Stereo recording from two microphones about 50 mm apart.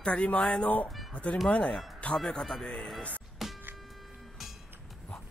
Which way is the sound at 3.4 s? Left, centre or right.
Centre.